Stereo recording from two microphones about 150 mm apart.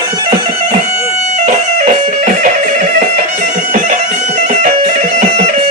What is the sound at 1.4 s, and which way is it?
Music, 50° right (ahead or behind).